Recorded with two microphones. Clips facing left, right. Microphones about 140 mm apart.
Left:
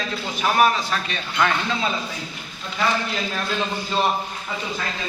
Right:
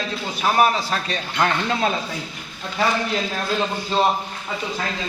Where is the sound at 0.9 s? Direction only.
40° right (ahead or behind).